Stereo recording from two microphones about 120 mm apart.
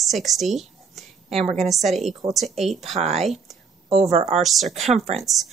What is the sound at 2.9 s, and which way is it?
Speech, 60° right (ahead or behind).